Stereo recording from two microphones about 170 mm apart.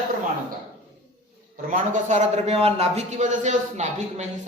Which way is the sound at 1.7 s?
45° right (ahead or behind).